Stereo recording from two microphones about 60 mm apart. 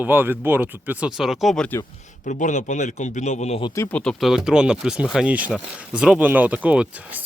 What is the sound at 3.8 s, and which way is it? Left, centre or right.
Speech, left.